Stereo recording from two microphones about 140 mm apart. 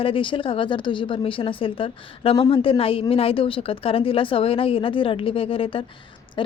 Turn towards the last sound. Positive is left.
turn(degrees=40)  # may be behind; listen again after turning